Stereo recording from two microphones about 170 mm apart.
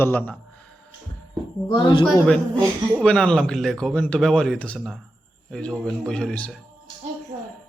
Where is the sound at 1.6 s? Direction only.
25° left (ahead or behind).